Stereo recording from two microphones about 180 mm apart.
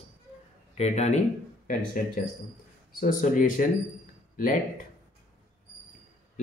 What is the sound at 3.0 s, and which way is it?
Speech, 50° left (ahead or behind).